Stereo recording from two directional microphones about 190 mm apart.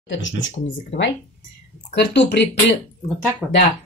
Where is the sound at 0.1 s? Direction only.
80° left.